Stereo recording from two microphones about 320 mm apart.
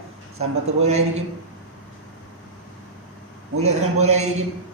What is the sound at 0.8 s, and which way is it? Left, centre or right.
Speech, centre.